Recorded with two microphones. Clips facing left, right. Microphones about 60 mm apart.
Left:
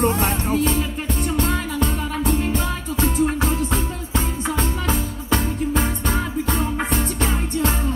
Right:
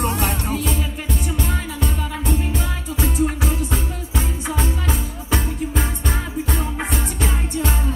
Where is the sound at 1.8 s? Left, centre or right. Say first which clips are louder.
Left 3 dB; centre.